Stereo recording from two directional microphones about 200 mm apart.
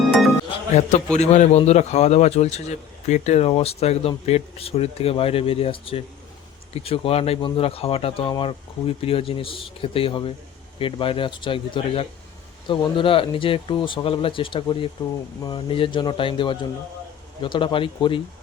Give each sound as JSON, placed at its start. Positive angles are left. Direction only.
{"t": 0.8, "sound": "a man's voice", "side_deg": 35}